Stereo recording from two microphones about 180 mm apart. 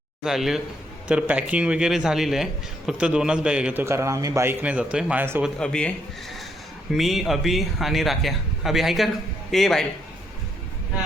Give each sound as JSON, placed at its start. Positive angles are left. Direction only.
{"t": 0.3, "sound": "a man's voice", "side_deg": 0}
{"t": 5.5, "sound": "a man's voice", "side_deg": 5}
{"t": 6.9, "sound": "a man's voice", "side_deg": 0}